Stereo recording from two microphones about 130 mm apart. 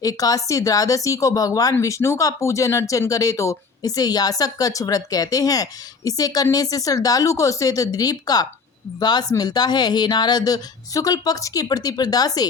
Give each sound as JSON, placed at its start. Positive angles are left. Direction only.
{"t": 0.0, "sound": "speech", "side_deg": 30}